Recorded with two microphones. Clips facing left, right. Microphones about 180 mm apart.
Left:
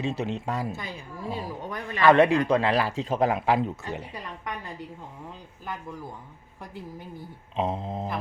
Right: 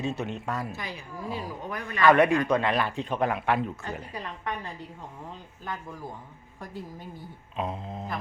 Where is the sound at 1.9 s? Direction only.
25° left (ahead or behind).